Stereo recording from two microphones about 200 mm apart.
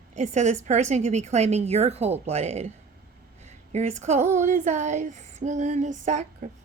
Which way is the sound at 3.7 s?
35° right (ahead or behind).